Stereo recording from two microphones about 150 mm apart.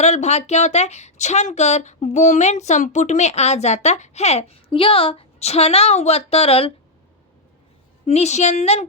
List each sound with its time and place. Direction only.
0.0 s speech: 50° left (ahead or behind)
8.0 s speech: 45° left (ahead or behind)